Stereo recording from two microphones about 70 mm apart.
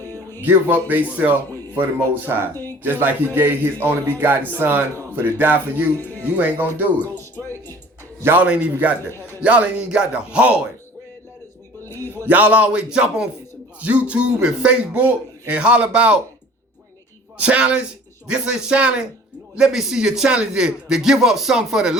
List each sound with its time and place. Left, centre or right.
0.4 s speech: right
8.4 s speech: right
9.0 s a man's voice: left
9.4 s a man's voice: centre
11.9 s music: right
12.3 s a man's voice: right
17.3 s a man's voice: centre